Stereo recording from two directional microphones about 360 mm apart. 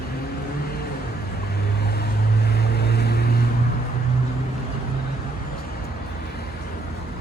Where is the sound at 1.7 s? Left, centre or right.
Left.